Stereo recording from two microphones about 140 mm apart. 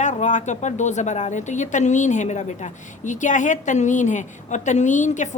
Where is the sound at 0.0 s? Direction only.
60° left (ahead or behind).